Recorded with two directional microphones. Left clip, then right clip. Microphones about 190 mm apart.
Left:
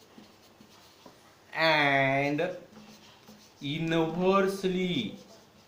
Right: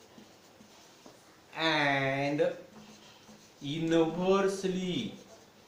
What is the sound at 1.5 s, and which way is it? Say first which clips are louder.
Speech: left 4 dB; 30° left (ahead or behind).